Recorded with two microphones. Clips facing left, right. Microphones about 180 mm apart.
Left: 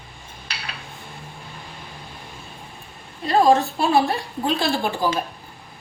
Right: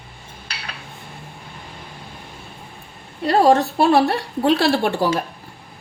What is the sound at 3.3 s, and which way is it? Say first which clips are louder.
A woman's voice: right 2 dB; 70° right (ahead or behind).